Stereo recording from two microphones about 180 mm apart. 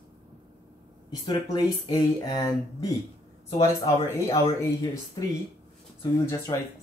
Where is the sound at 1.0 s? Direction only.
25° left (ahead or behind).